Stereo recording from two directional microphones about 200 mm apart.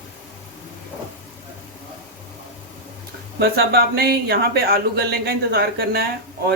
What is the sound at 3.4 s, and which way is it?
Speech, 50° right (ahead or behind).